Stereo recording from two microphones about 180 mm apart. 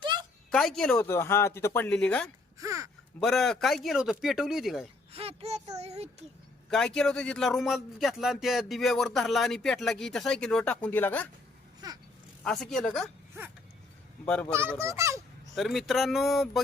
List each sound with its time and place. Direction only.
0.5 s speech: centre (ahead or behind)
1.0 s speech: 15° left (ahead or behind)
2.6 s speech: 15° right (ahead or behind)
3.2 s speech: centre (ahead or behind)
5.1 s a sound: 35° right (ahead or behind)
5.7 s speech: 35° right (ahead or behind)
6.7 s speech: 5° left (ahead or behind)
11.8 s a sound: 20° right (ahead or behind)
12.4 s speech: centre (ahead or behind)
14.3 s speech: 5° left (ahead or behind)
14.5 s a child's voice: 15° right (ahead or behind)
15.5 s speech: centre (ahead or behind)